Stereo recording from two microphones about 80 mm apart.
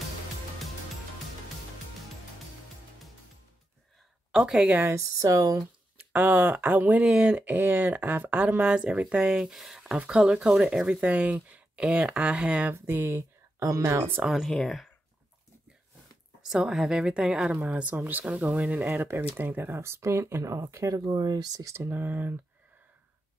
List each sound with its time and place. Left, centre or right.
4.3 s speech: centre
4.9 s speech: right
5.9 s speech: right
12.7 s speech: right
13.7 s speech: right
14.2 s speech: centre
16.4 s speech: centre
18.9 s speech: right
21.0 s speech: right
21.7 s speech: right